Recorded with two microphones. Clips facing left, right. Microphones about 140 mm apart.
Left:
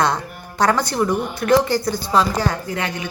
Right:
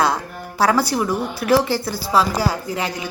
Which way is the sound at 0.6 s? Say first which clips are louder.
Even; 5° right (ahead or behind).